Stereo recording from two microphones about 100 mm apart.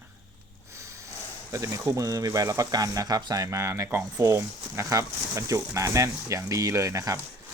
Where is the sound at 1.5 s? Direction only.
30° right (ahead or behind).